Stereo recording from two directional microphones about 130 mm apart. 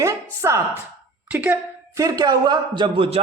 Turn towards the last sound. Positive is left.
turn(degrees=-40)  # may be behind; listen again after turning